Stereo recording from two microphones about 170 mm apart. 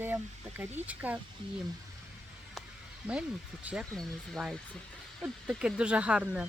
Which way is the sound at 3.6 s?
Centre (ahead or behind).